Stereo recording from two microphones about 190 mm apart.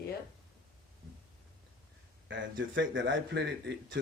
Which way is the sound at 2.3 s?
75° right (ahead or behind).